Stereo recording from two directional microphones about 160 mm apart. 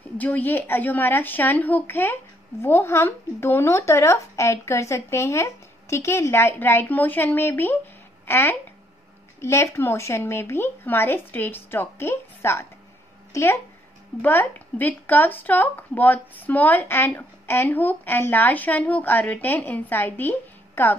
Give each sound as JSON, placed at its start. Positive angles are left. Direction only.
{"t": 0.2, "sound": "speech", "side_deg": 10}